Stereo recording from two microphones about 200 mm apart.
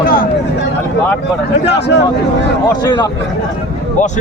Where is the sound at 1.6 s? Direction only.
60° left (ahead or behind).